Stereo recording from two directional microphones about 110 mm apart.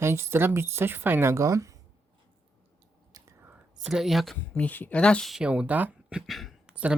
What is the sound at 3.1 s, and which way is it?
Whispering, 35° right (ahead or behind).